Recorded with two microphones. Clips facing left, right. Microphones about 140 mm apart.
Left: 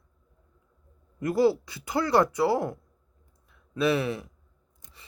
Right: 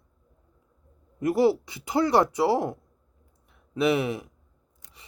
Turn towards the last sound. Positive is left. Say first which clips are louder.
# right 2 dB
turn(degrees=-20)  # may be behind; listen again after turning